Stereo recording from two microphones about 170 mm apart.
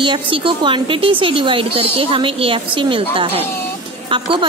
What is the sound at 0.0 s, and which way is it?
A woman's voice, 30° right (ahead or behind).